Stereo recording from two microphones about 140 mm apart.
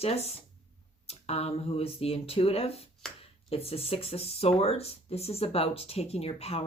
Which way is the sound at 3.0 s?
5° left (ahead or behind).